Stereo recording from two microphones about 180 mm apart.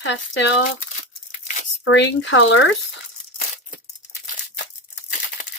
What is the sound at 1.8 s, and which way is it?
Speech, 85° left.